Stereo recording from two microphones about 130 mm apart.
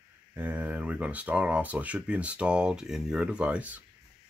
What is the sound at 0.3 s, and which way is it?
Speech, 15° right (ahead or behind).